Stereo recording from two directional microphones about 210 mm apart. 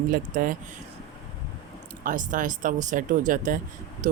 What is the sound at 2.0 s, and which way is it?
Speech, 40° right (ahead or behind).